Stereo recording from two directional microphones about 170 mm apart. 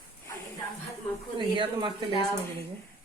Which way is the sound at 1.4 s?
30° right (ahead or behind).